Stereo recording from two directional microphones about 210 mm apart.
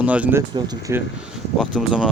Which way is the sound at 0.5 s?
20° right (ahead or behind).